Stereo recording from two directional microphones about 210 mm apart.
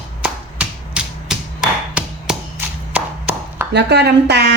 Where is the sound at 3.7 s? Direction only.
55° right (ahead or behind).